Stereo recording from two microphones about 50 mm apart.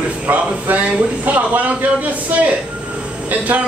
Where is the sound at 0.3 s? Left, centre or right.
Right.